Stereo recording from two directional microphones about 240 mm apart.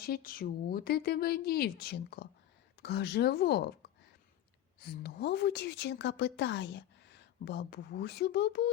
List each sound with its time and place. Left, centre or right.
0.0 s a woman's voice: left